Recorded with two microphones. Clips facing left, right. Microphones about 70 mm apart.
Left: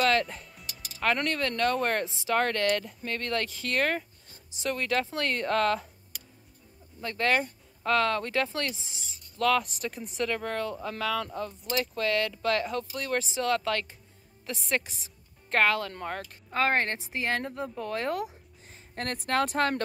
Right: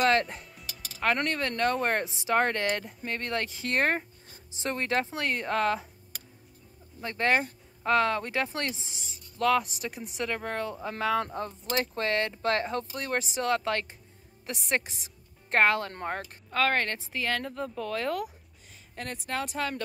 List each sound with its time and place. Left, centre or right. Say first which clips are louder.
0.0 s music: right 1 dB; right
1.1 s speech: even; centre
7.0 s speech: even; right
16.5 s speech: even; left
18.9 s speech: left 6 dB; left